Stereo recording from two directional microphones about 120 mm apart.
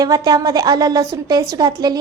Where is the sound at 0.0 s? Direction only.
35° right (ahead or behind).